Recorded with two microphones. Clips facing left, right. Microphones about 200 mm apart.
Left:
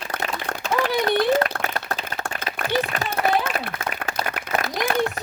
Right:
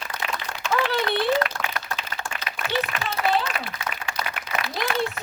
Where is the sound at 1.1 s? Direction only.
40° left (ahead or behind).